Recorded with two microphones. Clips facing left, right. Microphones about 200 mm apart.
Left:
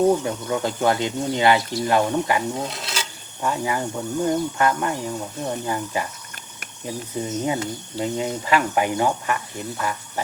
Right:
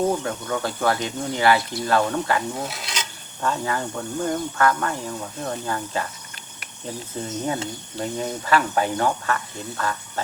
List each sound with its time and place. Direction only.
0.3 s speech: 15° left (ahead or behind)
2.6 s insect: centre (ahead or behind); by 4.9 s 15° left (ahead or behind)
5.5 s speech: 15° left (ahead or behind)